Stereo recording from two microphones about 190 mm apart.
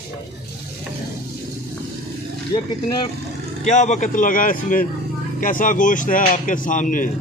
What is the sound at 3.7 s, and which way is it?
Speech, 40° left (ahead or behind).